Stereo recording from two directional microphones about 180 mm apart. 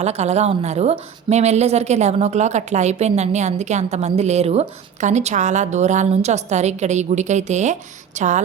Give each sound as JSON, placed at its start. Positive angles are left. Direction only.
{"t": 0.0, "sound": "a woman's voice", "side_deg": -35}